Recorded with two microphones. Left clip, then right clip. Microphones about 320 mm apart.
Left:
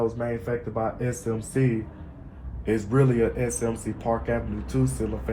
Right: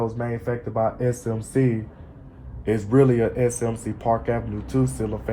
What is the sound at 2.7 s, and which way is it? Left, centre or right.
Speech, right.